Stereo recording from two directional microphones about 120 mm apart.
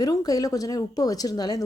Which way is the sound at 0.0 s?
30° left (ahead or behind).